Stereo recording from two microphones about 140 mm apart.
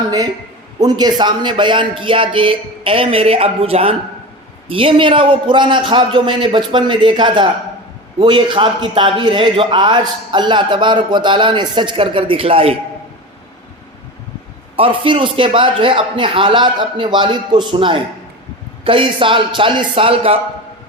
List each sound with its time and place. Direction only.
0.8 s a man's voice: 30° right (ahead or behind)
14.8 s a man's voice: 35° right (ahead or behind)